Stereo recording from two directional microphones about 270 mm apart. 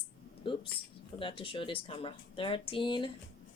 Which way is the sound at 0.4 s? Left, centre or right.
Centre.